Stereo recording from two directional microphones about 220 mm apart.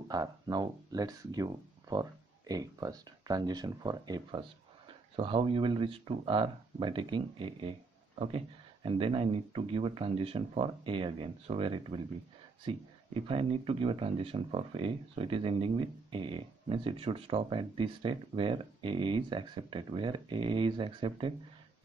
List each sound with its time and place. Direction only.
0.1 s speech: 20° right (ahead or behind)